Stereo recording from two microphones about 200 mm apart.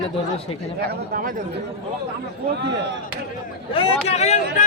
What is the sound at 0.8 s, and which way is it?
Speech, 50° right (ahead or behind).